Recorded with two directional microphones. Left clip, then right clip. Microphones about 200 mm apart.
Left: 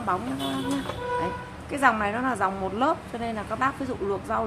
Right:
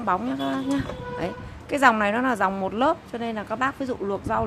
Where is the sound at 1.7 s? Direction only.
50° right (ahead or behind).